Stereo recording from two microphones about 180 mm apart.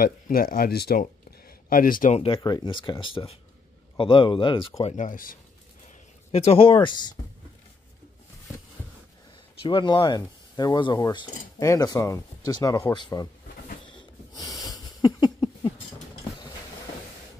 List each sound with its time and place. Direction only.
0.0 s a man's voice: 55° left (ahead or behind)
2.2 s speech: 25° left (ahead or behind)
4.9 s a man's voice: 45° left (ahead or behind)
6.3 s speech: 35° left (ahead or behind)
9.6 s speech: 25° left (ahead or behind)
14.4 s a sound: centre (ahead or behind)
15.0 s a sound: 25° left (ahead or behind)